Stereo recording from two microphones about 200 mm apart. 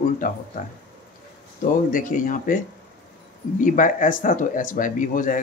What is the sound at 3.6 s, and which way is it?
Speech, 40° left (ahead or behind).